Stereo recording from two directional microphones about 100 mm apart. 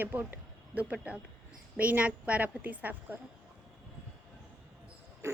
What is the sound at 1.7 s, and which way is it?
A woman's voice, 15° right (ahead or behind).